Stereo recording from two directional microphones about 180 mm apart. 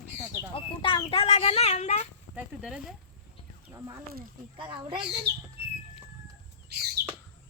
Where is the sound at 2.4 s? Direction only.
5° right (ahead or behind).